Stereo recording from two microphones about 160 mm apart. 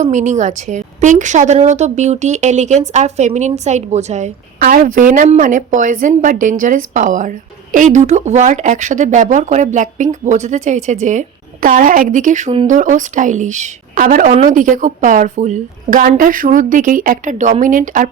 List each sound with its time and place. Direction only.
0.0 s a woman's voice: 50° right (ahead or behind)